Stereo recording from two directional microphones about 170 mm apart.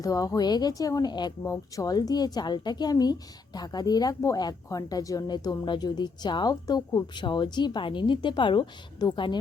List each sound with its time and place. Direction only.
0.0 s speech: 20° left (ahead or behind)